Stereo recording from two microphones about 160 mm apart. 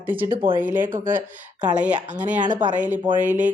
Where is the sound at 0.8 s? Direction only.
55° right (ahead or behind).